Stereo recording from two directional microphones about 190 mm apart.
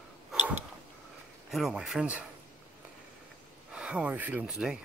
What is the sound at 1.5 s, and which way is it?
Speech, 5° right (ahead or behind).